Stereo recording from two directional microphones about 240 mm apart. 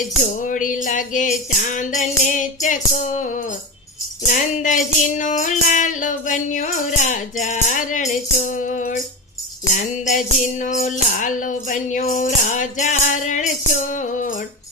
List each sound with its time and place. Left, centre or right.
0.2 s music: left